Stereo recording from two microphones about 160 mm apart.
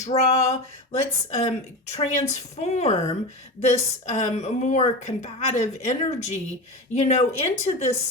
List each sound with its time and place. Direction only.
0.0 s a woman's voice: 40° left (ahead or behind)